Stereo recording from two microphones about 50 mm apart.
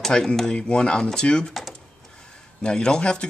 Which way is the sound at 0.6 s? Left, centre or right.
Left.